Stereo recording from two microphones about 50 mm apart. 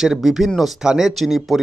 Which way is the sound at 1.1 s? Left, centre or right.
Centre.